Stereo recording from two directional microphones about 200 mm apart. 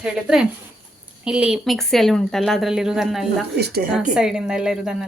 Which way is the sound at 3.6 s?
55° right (ahead or behind).